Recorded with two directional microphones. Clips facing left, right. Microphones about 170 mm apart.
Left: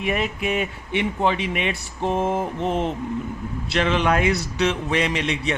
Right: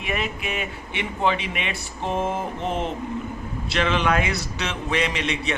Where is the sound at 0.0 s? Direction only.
40° left (ahead or behind).